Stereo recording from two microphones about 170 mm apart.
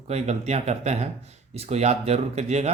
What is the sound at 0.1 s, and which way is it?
Speech, 40° right (ahead or behind).